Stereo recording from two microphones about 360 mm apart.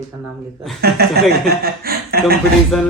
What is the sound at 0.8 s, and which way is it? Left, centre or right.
Speech, right.